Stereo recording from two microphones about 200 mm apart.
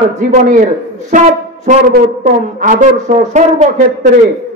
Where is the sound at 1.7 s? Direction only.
40° right (ahead or behind).